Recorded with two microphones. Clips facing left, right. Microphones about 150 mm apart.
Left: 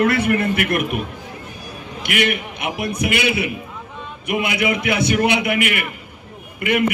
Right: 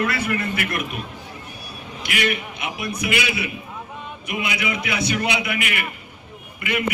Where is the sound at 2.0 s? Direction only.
55° left (ahead or behind).